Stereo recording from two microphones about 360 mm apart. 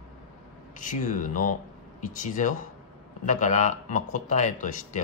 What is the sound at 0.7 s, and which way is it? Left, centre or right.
Speech, left.